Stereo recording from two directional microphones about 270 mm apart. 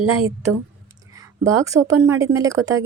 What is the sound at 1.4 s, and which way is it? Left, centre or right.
A woman's voice, centre.